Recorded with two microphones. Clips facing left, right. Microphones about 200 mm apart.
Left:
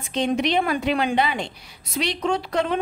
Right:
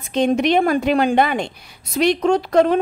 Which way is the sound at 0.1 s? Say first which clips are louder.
Right 5 dB; 50° right (ahead or behind).